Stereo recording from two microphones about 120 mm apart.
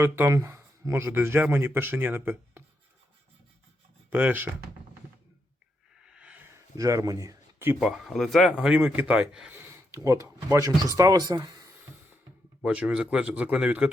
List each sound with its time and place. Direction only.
0.0 s speech: 20° right (ahead or behind)
4.1 s a man's voice: 15° right (ahead or behind)
6.0 s a sound: 5° right (ahead or behind)
6.5 s a sound: 30° right (ahead or behind)
7.8 s speech: 5° right (ahead or behind)
8.5 s a man's voice: 10° right (ahead or behind)
9.6 s speech: 25° right (ahead or behind)
12.6 s a man's voice: 10° right (ahead or behind)